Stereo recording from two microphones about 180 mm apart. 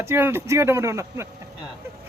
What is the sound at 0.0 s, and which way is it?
Speech, 15° right (ahead or behind).